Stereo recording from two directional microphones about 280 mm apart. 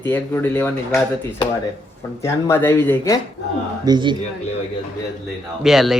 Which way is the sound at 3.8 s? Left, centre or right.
Centre.